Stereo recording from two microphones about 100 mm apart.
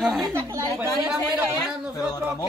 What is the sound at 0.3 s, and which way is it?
Speech, 25° right (ahead or behind).